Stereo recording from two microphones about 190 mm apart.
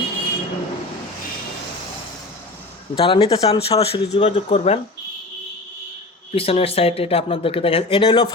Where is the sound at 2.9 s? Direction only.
25° left (ahead or behind).